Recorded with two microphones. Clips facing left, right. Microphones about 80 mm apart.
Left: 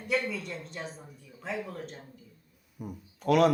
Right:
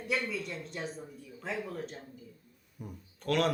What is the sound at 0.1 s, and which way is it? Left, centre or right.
A man's voice, centre.